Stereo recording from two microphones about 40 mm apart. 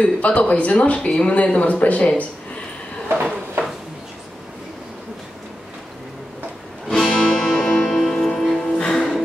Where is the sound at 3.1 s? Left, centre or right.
Right.